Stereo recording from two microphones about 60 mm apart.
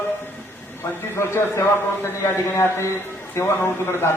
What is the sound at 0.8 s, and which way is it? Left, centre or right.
A man's voice, left.